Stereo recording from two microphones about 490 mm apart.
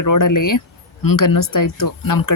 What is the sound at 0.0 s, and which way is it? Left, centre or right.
Speech, left.